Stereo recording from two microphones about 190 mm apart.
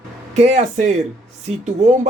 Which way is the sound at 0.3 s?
35° right (ahead or behind).